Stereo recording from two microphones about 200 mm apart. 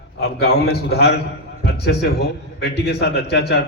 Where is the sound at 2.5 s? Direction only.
55° left (ahead or behind).